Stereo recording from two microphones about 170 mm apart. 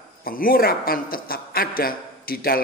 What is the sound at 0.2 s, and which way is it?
A man's voice, 55° left (ahead or behind).